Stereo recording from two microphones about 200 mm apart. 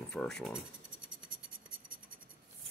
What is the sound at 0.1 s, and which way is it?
Speech, 5° left (ahead or behind).